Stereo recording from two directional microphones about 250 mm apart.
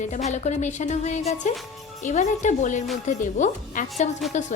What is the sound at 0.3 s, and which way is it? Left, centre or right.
Speech, left.